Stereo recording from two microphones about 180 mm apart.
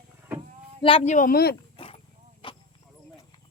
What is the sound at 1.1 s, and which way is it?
Speech, 55° left (ahead or behind).